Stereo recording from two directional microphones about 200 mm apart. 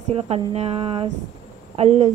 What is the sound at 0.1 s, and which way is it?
Speech, 30° right (ahead or behind).